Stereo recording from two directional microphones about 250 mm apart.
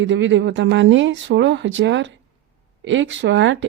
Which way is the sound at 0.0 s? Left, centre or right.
Right.